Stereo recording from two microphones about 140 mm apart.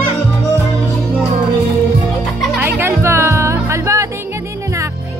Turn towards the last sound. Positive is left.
turn(degrees=-20)  # may be behind; listen again after turning